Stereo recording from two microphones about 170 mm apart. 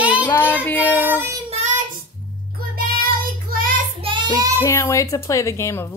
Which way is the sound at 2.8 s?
60° right (ahead or behind).